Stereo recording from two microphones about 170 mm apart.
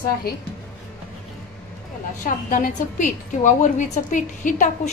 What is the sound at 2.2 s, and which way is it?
A woman's voice, 50° left (ahead or behind).